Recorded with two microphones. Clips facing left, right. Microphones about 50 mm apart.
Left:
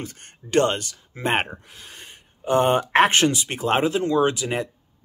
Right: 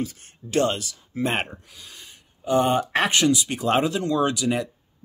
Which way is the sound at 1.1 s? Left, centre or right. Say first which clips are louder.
Left 2 dB; left.